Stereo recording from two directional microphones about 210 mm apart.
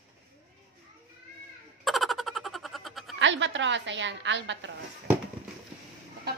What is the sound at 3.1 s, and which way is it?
A woman's voice, 60° right (ahead or behind).